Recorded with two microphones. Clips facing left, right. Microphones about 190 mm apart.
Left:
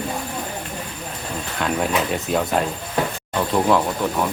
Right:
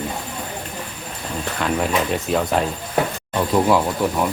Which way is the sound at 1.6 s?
Centre (ahead or behind).